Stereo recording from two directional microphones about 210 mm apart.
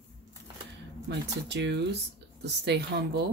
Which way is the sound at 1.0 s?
55° right (ahead or behind).